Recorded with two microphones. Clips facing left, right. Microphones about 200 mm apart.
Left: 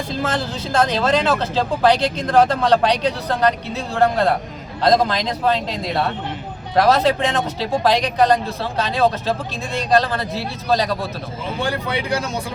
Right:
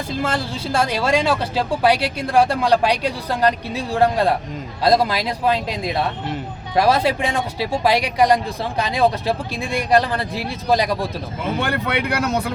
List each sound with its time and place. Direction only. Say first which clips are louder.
0.2 s speech: even; 10° right (ahead or behind)
11.6 s speech: left 1 dB; 60° right (ahead or behind)